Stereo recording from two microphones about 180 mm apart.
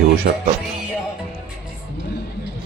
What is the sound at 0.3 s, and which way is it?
Speech, 60° right (ahead or behind).